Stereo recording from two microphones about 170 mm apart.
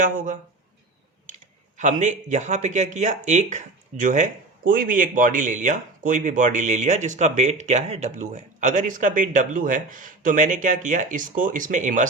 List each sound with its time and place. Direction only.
0.0 s speech: 50° right (ahead or behind)
1.8 s speech: 45° right (ahead or behind)